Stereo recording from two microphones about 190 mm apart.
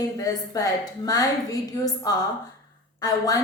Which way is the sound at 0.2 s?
20° left (ahead or behind).